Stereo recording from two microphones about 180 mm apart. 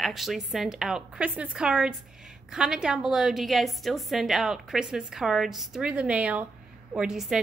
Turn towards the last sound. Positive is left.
turn(degrees=0)  # may be behind; listen again after turning